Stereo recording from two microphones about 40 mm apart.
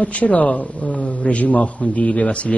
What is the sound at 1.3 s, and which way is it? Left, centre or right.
A man's voice, left.